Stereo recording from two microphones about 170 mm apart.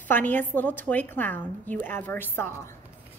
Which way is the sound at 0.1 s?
10° left (ahead or behind).